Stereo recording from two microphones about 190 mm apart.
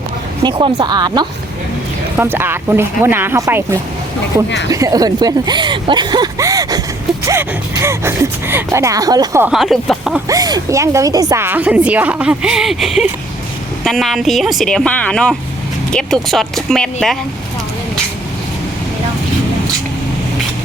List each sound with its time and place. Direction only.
0.4 s speech: 25° right (ahead or behind)
2.1 s a woman's voice: 10° right (ahead or behind)
9.5 s speech: centre (ahead or behind)
10.2 s a woman's voice: 20° right (ahead or behind); by 17.2 s 5° left (ahead or behind)